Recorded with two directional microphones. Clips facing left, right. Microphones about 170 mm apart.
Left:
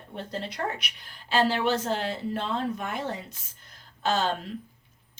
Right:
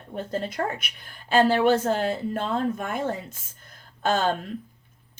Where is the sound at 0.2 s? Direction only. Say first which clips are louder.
Right 5 dB; 50° right (ahead or behind).